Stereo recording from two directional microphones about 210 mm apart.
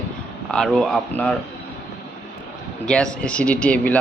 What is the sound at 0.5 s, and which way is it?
Speech, centre (ahead or behind).